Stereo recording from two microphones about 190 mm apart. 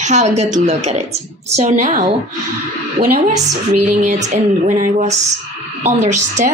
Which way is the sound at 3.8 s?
45° right (ahead or behind).